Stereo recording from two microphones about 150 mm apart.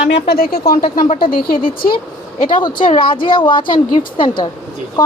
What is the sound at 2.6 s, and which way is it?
A woman's voice, 35° left (ahead or behind).